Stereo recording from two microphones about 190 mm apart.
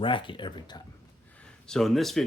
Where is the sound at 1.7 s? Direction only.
Centre (ahead or behind).